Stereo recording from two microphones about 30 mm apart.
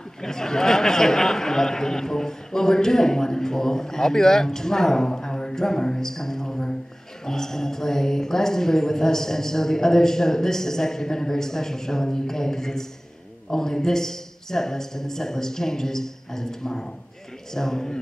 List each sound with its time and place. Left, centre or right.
0.2 s speech: centre